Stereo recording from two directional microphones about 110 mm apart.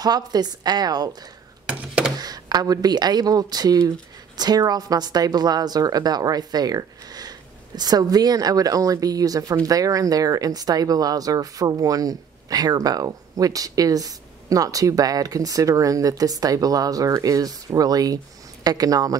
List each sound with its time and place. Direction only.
0.0 s a woman's voice: 35° right (ahead or behind)
1.7 s a sound: 5° right (ahead or behind)
2.1 s a woman's voice: 35° right (ahead or behind)